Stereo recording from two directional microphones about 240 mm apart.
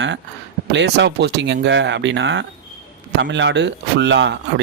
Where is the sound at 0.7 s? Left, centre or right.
Right.